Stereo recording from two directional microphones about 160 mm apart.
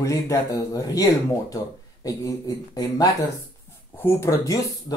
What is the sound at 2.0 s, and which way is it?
Speech, 20° left (ahead or behind).